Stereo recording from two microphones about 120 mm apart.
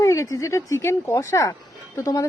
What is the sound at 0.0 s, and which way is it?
Speech, 25° left (ahead or behind).